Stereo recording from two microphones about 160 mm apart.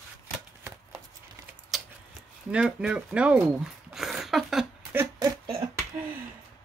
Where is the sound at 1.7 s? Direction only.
Centre (ahead or behind).